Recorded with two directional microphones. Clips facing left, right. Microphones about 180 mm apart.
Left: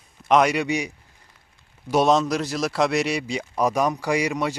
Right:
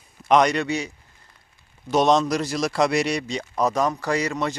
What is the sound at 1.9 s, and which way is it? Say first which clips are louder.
Speech: even; 5° left (ahead or behind).